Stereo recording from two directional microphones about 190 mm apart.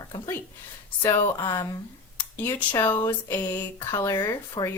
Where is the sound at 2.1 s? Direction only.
10° left (ahead or behind).